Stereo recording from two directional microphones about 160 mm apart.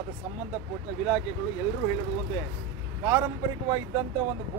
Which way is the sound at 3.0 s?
15° right (ahead or behind).